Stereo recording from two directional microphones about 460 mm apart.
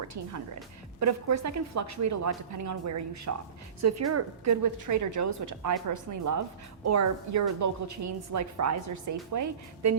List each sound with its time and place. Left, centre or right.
0.0 s a woman's voice: right